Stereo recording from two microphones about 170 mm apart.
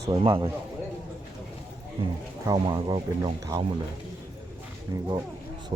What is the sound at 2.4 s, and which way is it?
Speech, 25° right (ahead or behind).